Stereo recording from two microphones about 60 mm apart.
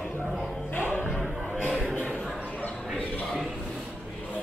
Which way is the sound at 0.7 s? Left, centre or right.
Left.